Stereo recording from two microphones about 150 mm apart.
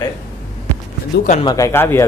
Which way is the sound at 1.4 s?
20° left (ahead or behind).